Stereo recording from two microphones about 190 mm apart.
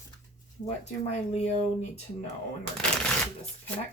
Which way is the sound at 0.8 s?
35° left (ahead or behind).